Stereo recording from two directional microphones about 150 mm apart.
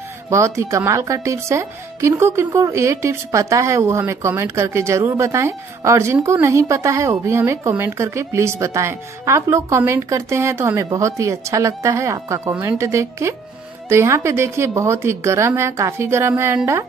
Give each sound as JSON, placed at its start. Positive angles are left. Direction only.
{"t": 0.3, "sound": "a woman's voice", "side_deg": -20}